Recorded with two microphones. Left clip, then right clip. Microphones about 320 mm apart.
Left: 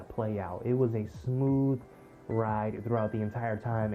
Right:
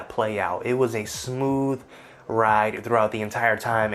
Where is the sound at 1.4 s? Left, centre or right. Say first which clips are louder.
Right 6 dB; right.